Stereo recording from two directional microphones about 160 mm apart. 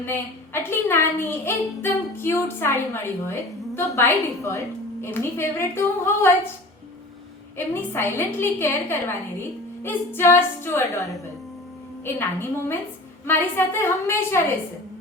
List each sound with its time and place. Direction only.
0.0 s a woman's voice: 15° left (ahead or behind)
7.5 s a woman's voice: 15° left (ahead or behind)